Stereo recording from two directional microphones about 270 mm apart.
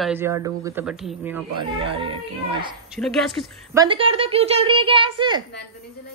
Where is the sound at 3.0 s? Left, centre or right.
Centre.